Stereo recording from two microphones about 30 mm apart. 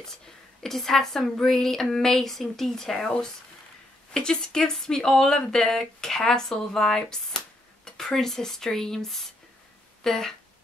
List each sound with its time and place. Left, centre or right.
0.6 s speech: centre
4.1 s speech: left
10.0 s speech: centre